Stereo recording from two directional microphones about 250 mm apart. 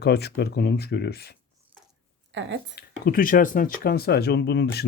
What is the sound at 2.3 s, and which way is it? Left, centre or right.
Speech, right.